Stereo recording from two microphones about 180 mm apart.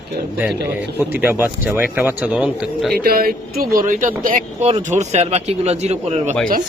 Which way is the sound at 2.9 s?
55° right (ahead or behind).